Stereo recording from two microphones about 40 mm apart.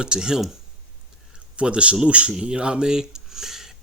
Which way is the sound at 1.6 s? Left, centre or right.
Right.